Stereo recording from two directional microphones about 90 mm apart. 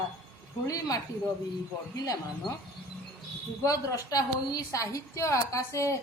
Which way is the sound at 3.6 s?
40° left (ahead or behind).